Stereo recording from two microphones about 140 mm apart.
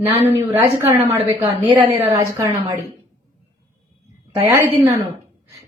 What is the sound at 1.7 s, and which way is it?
Speech, 35° right (ahead or behind).